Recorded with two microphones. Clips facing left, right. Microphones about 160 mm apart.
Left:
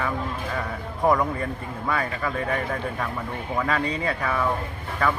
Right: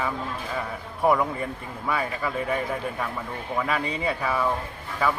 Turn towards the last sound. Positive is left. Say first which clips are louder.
# left 1 dB
turn(degrees=-10)  # may be behind; listen again after turning